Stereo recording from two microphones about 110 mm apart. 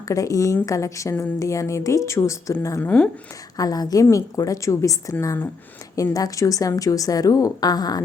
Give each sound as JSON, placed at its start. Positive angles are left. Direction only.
{"t": 0.1, "sound": "a woman's voice", "side_deg": 30}
{"t": 2.8, "sound": "speech", "side_deg": 15}
{"t": 3.6, "sound": "a woman's voice", "side_deg": 35}